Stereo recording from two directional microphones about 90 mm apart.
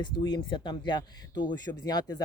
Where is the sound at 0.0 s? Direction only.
55° left (ahead or behind).